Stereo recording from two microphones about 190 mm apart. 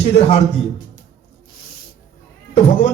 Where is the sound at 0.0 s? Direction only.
35° left (ahead or behind).